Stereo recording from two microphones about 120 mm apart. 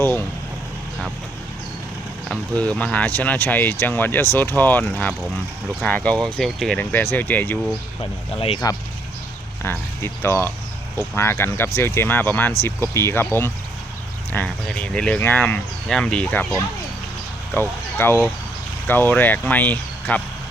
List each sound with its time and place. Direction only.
2.6 s speech: 10° left (ahead or behind)
8.6 s speech: 30° left (ahead or behind)
9.6 s speech: 20° left (ahead or behind)
14.3 s speech: 10° left (ahead or behind)